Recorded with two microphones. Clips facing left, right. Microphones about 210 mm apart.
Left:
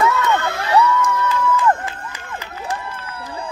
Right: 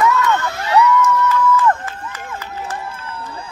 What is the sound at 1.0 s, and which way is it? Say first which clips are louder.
Crowd: right 3 dB; 15° left (ahead or behind).